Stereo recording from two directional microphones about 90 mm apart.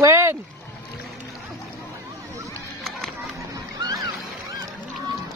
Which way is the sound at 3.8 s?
45° right (ahead or behind).